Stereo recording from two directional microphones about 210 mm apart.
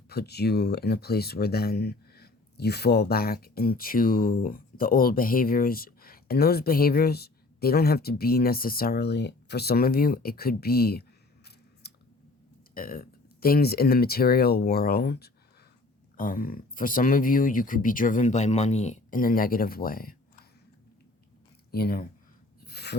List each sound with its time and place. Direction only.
0.1 s speech: 50° left (ahead or behind)
11.8 s clicking: 50° left (ahead or behind)
12.7 s speech: 45° left (ahead or behind)
21.7 s speech: 45° left (ahead or behind)
22.6 s a sound: 50° left (ahead or behind)